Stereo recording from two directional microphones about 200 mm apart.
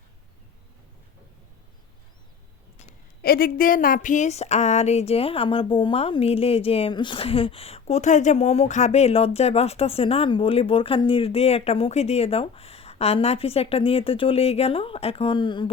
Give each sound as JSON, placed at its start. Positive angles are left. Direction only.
{"t": 3.2, "sound": "speech", "side_deg": 50}